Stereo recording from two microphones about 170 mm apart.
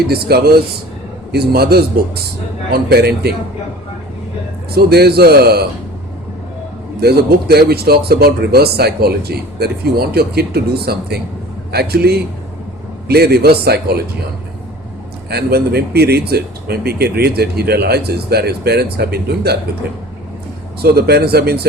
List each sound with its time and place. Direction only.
0.1 s speech: 65° right (ahead or behind)
4.7 s speech: 70° right (ahead or behind)
7.0 s speech: 70° right (ahead or behind)
15.3 s speech: 70° right (ahead or behind)
20.8 s speech: 65° right (ahead or behind)